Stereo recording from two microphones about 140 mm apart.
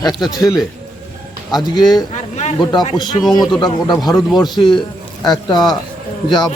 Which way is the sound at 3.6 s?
30° left (ahead or behind).